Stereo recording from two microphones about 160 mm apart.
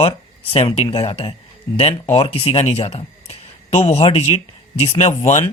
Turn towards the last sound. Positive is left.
turn(degrees=45)  # may be behind; listen again after turning